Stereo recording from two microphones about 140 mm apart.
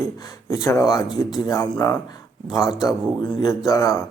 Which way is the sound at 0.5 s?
25° left (ahead or behind).